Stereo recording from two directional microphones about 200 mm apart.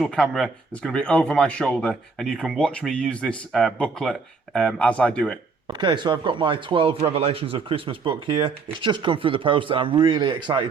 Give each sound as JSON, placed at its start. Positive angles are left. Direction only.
{"t": 0.0, "sound": "speech", "side_deg": 0}
{"t": 5.6, "sound": "speech", "side_deg": -20}